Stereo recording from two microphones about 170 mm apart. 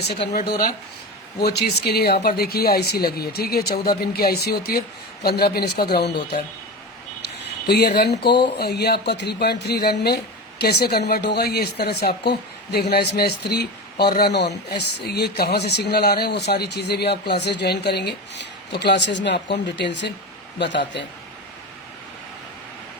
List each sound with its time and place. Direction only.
1.4 s speech: 70° left (ahead or behind)
7.2 s a sound: 75° left (ahead or behind)
8.5 s a man's voice: 70° left (ahead or behind); by 21.1 s 90° left